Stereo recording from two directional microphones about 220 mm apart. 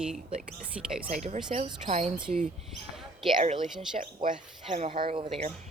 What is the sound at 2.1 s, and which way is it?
Speech, 5° right (ahead or behind).